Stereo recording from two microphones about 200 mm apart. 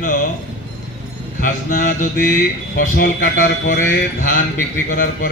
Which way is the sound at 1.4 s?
40° left (ahead or behind).